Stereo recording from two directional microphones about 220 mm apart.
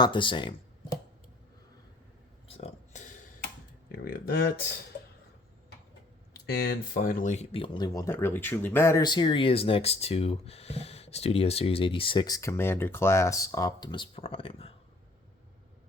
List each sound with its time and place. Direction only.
0.0 s speech: 20° left (ahead or behind)
2.5 s a sound: 30° left (ahead or behind)
3.9 s speech: 40° left (ahead or behind)
6.3 s speech: 45° left (ahead or behind); by 14.7 s 25° left (ahead or behind)